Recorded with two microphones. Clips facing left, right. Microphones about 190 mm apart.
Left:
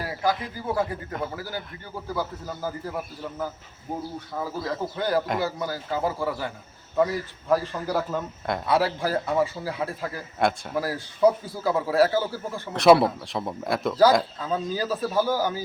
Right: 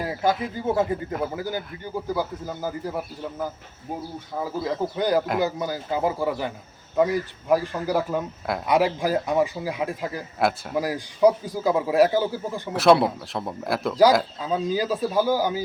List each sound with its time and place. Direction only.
0.5 s speech: 25° right (ahead or behind)
12.7 s a man's voice: centre (ahead or behind)